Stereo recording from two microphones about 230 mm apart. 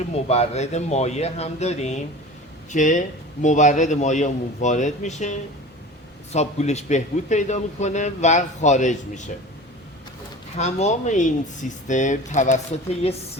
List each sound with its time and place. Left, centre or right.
0.3 s a man's voice: left
10.6 s a man's voice: left